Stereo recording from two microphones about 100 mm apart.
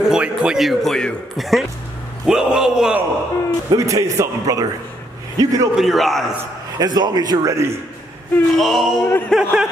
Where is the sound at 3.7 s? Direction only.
30° right (ahead or behind).